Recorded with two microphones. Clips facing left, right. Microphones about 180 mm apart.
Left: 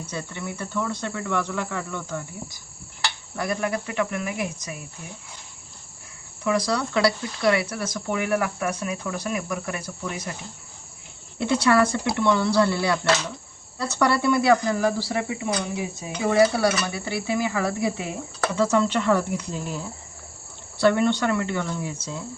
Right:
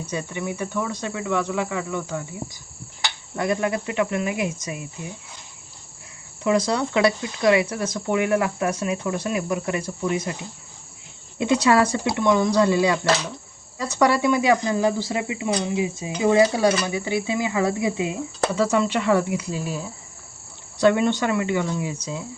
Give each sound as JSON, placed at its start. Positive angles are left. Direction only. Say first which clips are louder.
{"t": 0.1, "sound": "cricket", "louder": "right 6 dB", "side_deg": -15}
{"t": 3.3, "sound": "speech", "louder": "right 4 dB", "side_deg": -20}
{"t": 6.4, "sound": "speech", "louder": "right 3 dB", "side_deg": -25}
{"t": 11.3, "sound": "cricket", "louder": "right 2 dB", "side_deg": -20}
{"t": 16.8, "sound": "speech", "louder": "right 4 dB", "side_deg": -15}
{"t": 18.6, "sound": "cricket", "louder": "left 1 dB", "side_deg": -10}